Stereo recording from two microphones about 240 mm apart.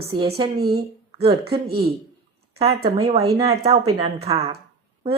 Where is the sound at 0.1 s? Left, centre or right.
Right.